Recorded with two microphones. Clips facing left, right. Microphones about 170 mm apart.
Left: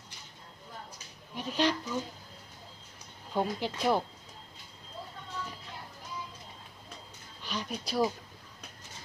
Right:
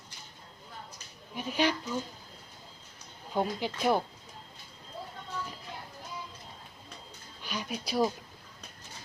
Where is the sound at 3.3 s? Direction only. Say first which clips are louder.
Even; centre (ahead or behind).